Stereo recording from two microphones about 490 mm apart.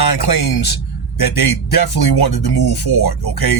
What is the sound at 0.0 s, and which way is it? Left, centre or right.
Speech, left.